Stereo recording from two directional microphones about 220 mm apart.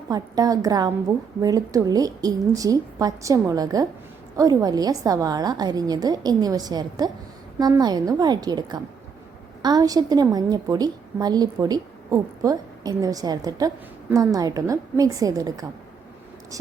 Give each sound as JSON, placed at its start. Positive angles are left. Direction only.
{"t": 0.1, "sound": "a woman's voice", "side_deg": -15}